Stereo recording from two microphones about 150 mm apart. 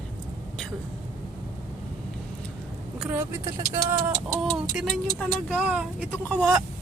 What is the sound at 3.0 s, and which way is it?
Speech, 15° right (ahead or behind).